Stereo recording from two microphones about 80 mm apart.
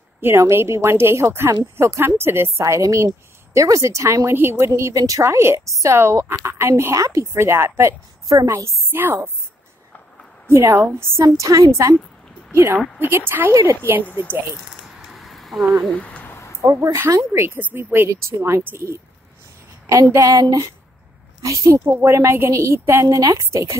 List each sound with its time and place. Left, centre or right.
0.2 s speech: right
8.9 s a woman's voice: right
10.5 s speech: right
14.7 s a sound: centre
15.9 s speech: centre
16.3 s a sound: left
16.6 s a woman's voice: right
18.0 s speech: right
19.9 s a woman's voice: right
23.0 s a woman's voice: right
23.3 s speech: right